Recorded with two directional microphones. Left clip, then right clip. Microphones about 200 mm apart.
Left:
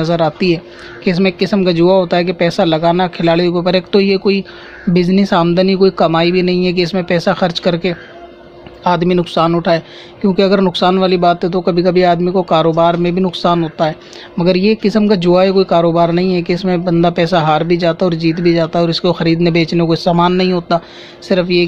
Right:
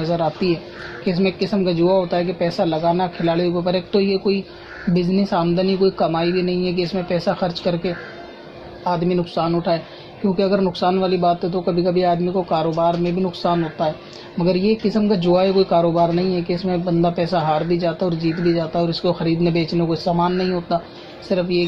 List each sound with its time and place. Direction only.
0.0 s a man's voice: 30° left (ahead or behind)